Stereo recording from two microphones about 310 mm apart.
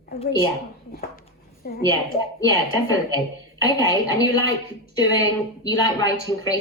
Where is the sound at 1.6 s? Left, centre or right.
Left.